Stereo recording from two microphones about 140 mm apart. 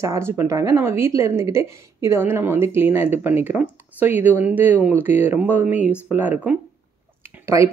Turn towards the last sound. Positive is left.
turn(degrees=-20)  # may be behind; listen again after turning